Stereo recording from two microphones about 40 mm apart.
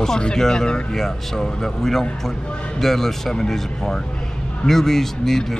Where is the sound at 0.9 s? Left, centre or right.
Centre.